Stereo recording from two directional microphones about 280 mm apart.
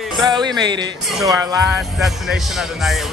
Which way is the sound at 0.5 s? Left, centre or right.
Centre.